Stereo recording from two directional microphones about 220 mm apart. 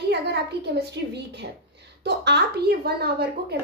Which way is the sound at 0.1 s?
50° right (ahead or behind).